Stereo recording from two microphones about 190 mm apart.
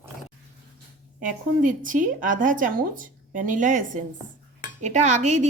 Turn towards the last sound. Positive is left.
turn(degrees=-40)  # may be behind; listen again after turning